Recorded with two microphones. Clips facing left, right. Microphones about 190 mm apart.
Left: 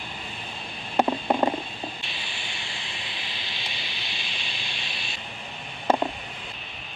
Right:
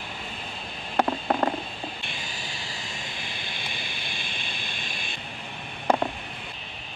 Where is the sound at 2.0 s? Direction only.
45° right (ahead or behind).